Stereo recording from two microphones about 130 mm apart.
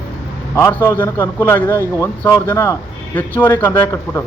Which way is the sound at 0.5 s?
20° left (ahead or behind).